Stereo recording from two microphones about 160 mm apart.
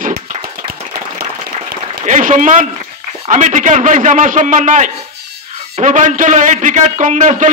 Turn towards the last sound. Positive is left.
turn(degrees=-50)  # may be behind; listen again after turning